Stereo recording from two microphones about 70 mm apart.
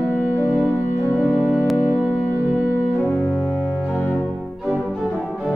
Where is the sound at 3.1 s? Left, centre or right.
Left.